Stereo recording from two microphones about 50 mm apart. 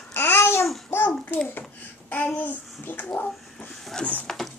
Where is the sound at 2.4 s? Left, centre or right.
Left.